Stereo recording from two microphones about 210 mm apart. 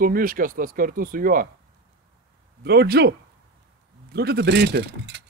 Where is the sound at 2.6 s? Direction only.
50° right (ahead or behind).